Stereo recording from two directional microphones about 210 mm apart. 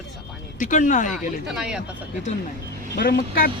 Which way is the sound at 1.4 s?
5° right (ahead or behind).